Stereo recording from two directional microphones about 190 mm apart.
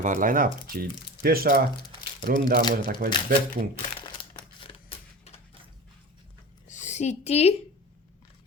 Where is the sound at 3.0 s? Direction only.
45° right (ahead or behind).